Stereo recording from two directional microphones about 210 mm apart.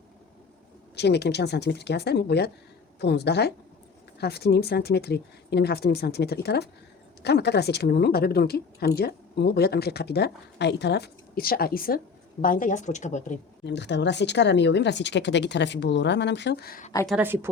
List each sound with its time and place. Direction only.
0.9 s a woman's voice: 55° left (ahead or behind); by 13.4 s 35° left (ahead or behind)
13.7 s speech: 55° left (ahead or behind)
17.1 s a woman's voice: 10° right (ahead or behind)